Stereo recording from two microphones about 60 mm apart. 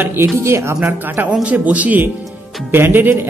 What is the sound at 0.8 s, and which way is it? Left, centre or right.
A woman's voice, right.